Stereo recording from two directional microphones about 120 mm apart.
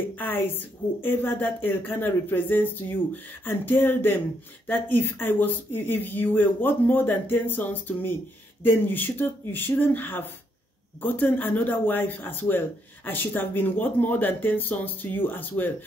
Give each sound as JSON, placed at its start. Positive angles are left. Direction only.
{"t": 0.1, "sound": "speech", "side_deg": 15}